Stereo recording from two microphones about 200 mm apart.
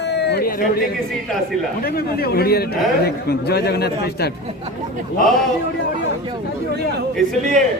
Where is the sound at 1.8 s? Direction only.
50° left (ahead or behind).